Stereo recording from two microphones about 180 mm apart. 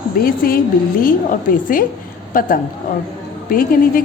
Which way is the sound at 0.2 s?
55° left (ahead or behind).